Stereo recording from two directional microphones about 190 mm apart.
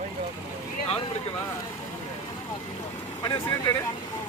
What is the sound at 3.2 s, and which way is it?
Speech, 25° left (ahead or behind).